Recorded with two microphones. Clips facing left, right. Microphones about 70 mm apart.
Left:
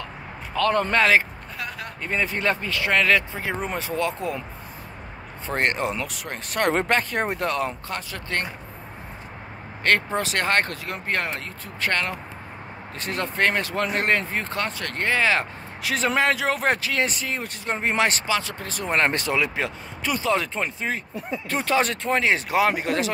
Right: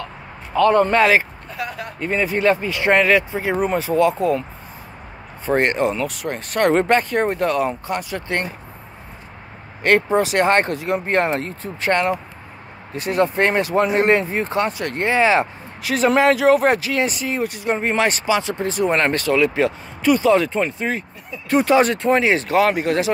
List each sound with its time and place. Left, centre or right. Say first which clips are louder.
0.6 s speech: right 6 dB; centre
2.8 s speech: right 5 dB; right
3.1 s speech: right 5 dB; centre
5.5 s speech: right 6 dB; centre
8.1 s speech: right 5 dB; centre
9.8 s speech: right 6 dB; centre
15.8 s speech: right 6 dB; centre
18.5 s speech: right 11 dB; right
18.9 s speech: right 2 dB; centre
19.1 s speech: right 7 dB; centre
19.5 s speech: right 8 dB; centre
22.5 s speech: right 5 dB; centre